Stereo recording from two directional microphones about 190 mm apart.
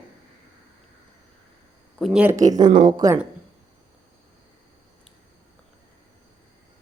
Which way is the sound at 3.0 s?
15° right (ahead or behind).